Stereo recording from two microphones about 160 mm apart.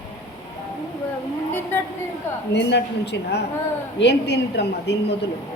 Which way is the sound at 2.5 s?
90° left.